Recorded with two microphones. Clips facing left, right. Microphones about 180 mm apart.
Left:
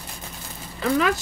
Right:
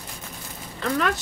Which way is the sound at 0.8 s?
5° left (ahead or behind).